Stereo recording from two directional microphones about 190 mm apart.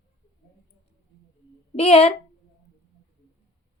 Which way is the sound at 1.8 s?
30° left (ahead or behind).